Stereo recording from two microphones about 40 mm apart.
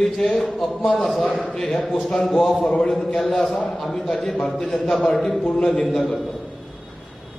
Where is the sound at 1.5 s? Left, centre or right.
Centre.